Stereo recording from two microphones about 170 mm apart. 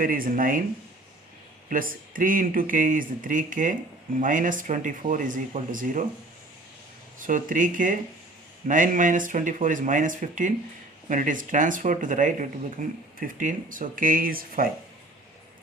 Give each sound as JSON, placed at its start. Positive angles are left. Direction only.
{"t": 0.0, "sound": "speech", "side_deg": -55}
{"t": 1.7, "sound": "speech", "side_deg": -55}
{"t": 7.2, "sound": "speech", "side_deg": -50}